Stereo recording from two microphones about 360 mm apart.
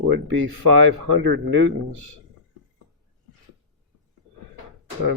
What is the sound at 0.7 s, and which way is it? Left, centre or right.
Speech, right.